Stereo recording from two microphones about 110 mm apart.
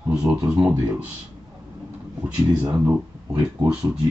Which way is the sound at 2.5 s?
15° right (ahead or behind).